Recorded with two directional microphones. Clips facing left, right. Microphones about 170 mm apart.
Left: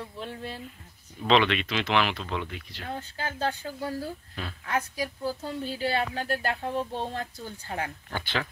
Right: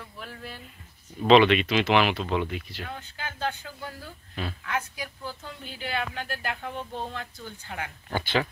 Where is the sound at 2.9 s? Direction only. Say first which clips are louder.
Left 7 dB; 35° left (ahead or behind).